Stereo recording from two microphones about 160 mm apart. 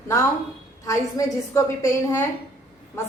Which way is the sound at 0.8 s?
20° left (ahead or behind).